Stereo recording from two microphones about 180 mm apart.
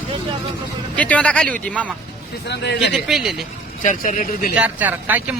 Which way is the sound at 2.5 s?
70° left (ahead or behind).